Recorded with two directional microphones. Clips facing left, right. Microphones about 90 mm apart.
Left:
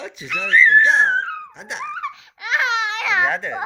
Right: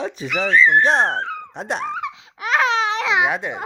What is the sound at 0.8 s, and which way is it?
Speech, 50° right (ahead or behind).